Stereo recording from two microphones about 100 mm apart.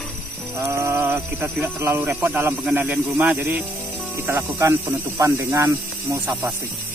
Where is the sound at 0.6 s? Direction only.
30° right (ahead or behind).